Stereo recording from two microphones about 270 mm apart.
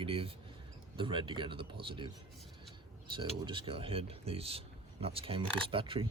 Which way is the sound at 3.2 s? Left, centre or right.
Centre.